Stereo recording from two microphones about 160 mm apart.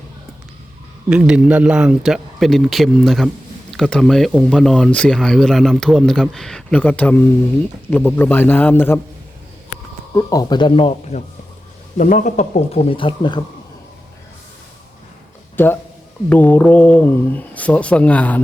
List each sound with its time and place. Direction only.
1.1 s speech: 5° right (ahead or behind); by 9.0 s 15° left (ahead or behind)
10.2 s speech: 20° left (ahead or behind)
11.9 s speech: 50° left (ahead or behind); by 13.4 s 30° left (ahead or behind)
15.5 s speech: 15° left (ahead or behind)